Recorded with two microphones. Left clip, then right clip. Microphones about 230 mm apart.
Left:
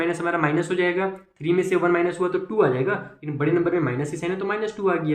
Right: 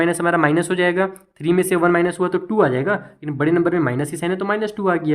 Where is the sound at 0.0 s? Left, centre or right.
Right.